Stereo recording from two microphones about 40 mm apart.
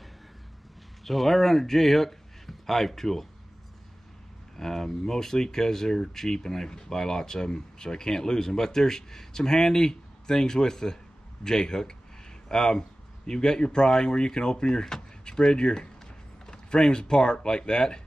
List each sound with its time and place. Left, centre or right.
1.0 s a man's voice: centre
4.6 s speech: centre